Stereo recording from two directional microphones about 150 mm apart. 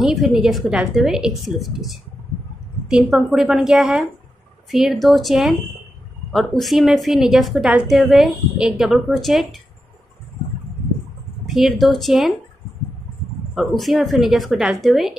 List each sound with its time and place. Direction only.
0.0 s a woman's voice: centre (ahead or behind)
11.4 s a woman's voice: centre (ahead or behind)
13.6 s a woman's voice: centre (ahead or behind)